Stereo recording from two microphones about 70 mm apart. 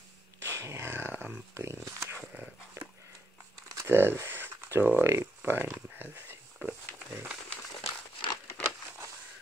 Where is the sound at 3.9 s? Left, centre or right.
Right.